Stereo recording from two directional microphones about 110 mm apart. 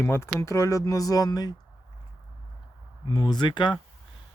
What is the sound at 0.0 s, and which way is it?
Speech, 25° left (ahead or behind).